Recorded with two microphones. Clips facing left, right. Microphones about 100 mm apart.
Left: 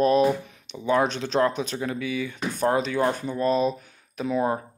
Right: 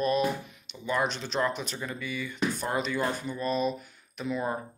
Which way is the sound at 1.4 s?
70° left (ahead or behind).